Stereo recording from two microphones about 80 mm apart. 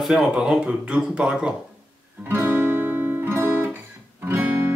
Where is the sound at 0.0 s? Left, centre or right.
Centre.